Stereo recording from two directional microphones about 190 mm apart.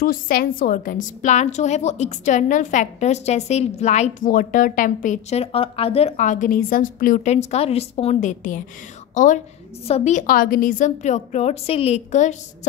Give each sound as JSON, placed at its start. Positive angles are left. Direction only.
{"t": 0.0, "sound": "a woman's voice", "side_deg": 50}